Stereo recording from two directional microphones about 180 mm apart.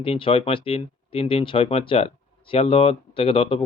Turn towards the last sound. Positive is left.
turn(degrees=30)  # may be behind; listen again after turning